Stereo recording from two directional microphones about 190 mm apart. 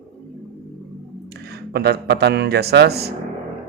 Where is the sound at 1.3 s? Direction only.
60° right (ahead or behind).